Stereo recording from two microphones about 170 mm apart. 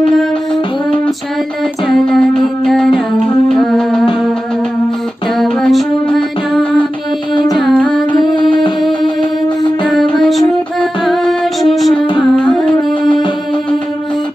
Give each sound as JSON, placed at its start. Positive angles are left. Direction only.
{"t": 1.9, "sound": "music", "side_deg": 5}
{"t": 5.4, "sound": "music", "side_deg": 0}
{"t": 7.3, "sound": "music", "side_deg": 25}
{"t": 7.6, "sound": "music", "side_deg": 0}
{"t": 8.4, "sound": "music", "side_deg": 30}
{"t": 9.8, "sound": "music", "side_deg": 0}